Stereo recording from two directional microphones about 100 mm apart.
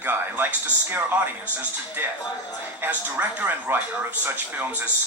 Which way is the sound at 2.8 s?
15° right (ahead or behind).